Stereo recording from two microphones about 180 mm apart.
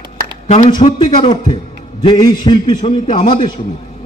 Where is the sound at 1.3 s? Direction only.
25° left (ahead or behind).